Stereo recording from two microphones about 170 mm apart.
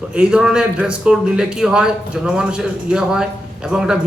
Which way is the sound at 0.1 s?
5° right (ahead or behind).